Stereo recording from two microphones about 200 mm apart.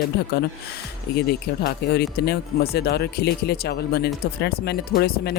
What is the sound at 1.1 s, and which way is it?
Speech, 50° left (ahead or behind).